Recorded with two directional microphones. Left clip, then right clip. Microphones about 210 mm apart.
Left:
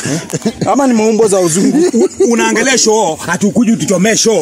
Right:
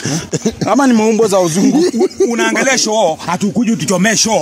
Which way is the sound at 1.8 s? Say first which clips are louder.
Left 2 dB; 25° right (ahead or behind).